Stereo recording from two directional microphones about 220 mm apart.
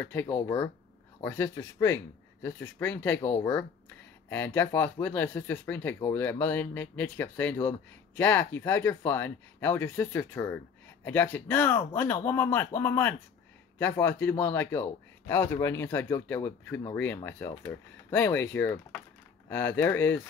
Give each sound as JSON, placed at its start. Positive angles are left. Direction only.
{"t": 0.0, "sound": "speech", "side_deg": 10}
{"t": 4.3, "sound": "speech", "side_deg": 10}